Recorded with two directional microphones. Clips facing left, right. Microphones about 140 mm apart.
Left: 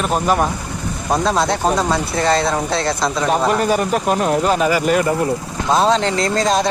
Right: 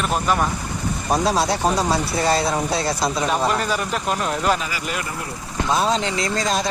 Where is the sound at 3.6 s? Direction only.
45° left (ahead or behind).